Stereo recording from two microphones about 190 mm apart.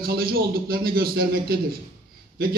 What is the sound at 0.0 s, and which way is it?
A man's voice, 50° right (ahead or behind).